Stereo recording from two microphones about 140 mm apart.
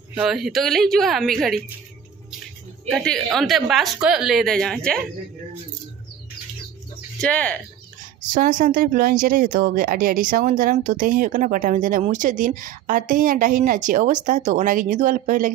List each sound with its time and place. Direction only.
0.1 s a woman's voice: 5° right (ahead or behind)
2.9 s a woman's voice: 5° left (ahead or behind)
7.2 s speech: 10° left (ahead or behind)
8.3 s a woman's voice: 75° right (ahead or behind)
13.8 s a woman's voice: 70° right (ahead or behind)